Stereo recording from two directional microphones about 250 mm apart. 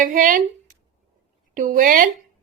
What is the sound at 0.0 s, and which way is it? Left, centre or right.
Speech, right.